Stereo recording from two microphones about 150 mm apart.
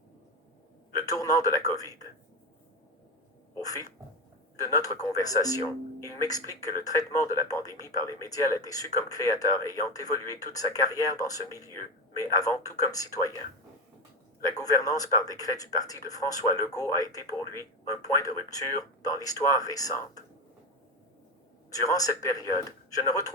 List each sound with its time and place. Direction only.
0.9 s speech: 25° left (ahead or behind)
3.5 s cat: 25° left (ahead or behind)
4.6 s speech: 20° left (ahead or behind)
14.4 s speech: 25° left (ahead or behind)
21.7 s speech: 25° left (ahead or behind)